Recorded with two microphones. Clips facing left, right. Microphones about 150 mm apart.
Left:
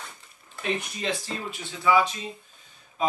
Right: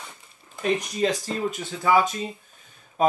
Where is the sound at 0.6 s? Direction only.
40° right (ahead or behind).